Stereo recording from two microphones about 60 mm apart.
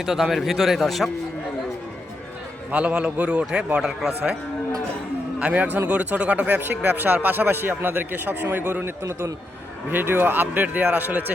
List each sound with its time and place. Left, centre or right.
0.0 s a man's voice: centre
2.7 s a man's voice: right
5.4 s a man's voice: right
9.9 s a man's voice: right